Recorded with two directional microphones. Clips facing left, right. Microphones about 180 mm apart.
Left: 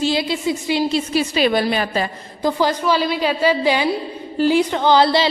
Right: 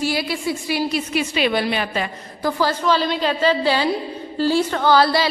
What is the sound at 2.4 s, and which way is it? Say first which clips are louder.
A woman's voice: left 2 dB; 15° left (ahead or behind).